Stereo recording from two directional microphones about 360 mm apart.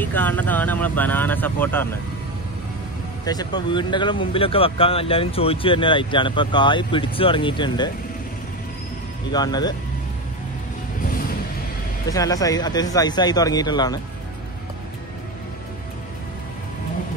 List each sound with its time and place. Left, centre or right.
0.0 s speech: centre
3.3 s speech: centre
9.3 s speech: centre
11.1 s music: left
12.1 s speech: centre